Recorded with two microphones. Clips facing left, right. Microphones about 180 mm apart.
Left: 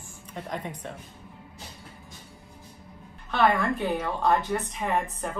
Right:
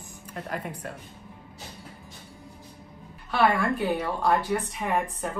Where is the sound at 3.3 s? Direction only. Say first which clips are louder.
Even; 10° right (ahead or behind).